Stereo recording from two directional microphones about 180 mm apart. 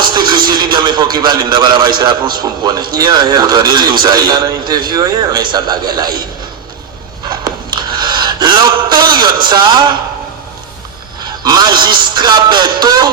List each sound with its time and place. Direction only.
0.0 s a man's voice: 25° right (ahead or behind)
7.3 s a sound: 25° right (ahead or behind)
11.2 s a man's voice: 25° right (ahead or behind)